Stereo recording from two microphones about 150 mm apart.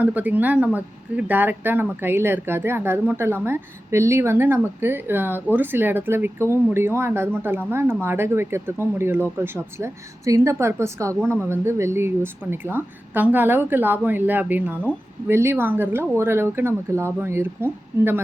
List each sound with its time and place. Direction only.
0.0 s speech: 10° right (ahead or behind)